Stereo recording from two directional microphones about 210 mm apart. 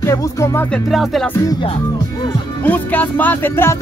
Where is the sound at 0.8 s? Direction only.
Centre (ahead or behind).